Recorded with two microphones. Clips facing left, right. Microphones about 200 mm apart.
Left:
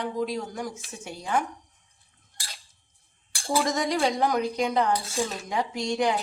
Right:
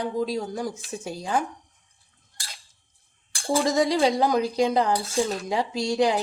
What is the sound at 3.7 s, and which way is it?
Speech, 30° right (ahead or behind).